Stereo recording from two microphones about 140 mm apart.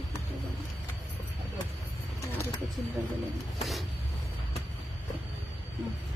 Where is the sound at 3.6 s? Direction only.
Centre (ahead or behind).